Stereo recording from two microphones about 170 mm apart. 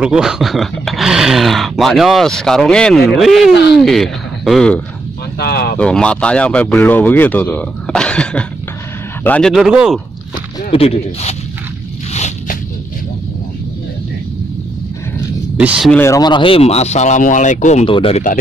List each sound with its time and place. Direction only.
0.0 s speech: 5° right (ahead or behind)
5.4 s speech: 70° left (ahead or behind)
5.8 s speech: 5° left (ahead or behind)
10.7 s speech: 35° left (ahead or behind)
15.5 s speech: 5° right (ahead or behind)
15.9 s speech: 15° left (ahead or behind)
16.2 s speech: 25° left (ahead or behind); by 17.8 s 45° left (ahead or behind)
17.8 s speech: 30° left (ahead or behind)